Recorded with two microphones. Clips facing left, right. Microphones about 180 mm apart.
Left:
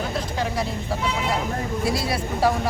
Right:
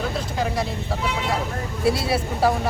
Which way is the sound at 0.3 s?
Centre (ahead or behind).